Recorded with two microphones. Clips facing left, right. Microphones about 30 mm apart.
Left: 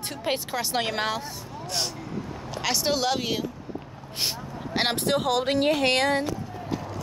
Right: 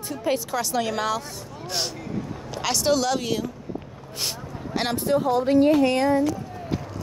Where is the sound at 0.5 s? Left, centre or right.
Centre.